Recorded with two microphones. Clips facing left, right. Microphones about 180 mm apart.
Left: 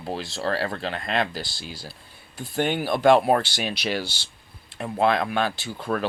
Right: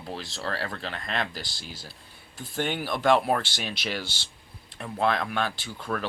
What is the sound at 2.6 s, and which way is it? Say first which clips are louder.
Speech: left 6 dB; 25° left (ahead or behind).